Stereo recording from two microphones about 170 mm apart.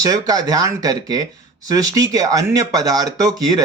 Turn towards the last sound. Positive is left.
turn(degrees=-20)  # may be behind; listen again after turning